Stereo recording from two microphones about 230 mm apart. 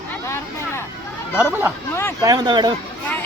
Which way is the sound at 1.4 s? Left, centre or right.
Centre.